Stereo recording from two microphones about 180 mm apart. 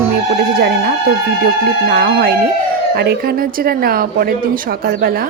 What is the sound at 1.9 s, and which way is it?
A woman's voice, 55° right (ahead or behind).